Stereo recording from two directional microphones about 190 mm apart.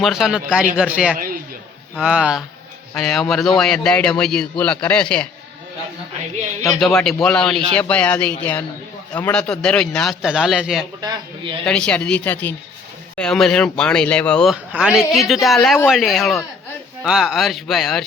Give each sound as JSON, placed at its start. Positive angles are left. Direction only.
{"t": 0.0, "sound": "a man's voice", "side_deg": 0}
{"t": 1.1, "sound": "a man's voice", "side_deg": -50}
{"t": 2.0, "sound": "a man's voice", "side_deg": -5}
{"t": 6.7, "sound": "a man's voice", "side_deg": 0}